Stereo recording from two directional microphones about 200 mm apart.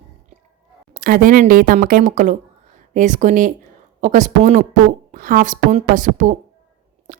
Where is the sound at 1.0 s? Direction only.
45° right (ahead or behind).